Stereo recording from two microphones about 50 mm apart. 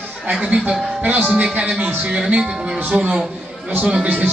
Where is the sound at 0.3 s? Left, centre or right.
Right.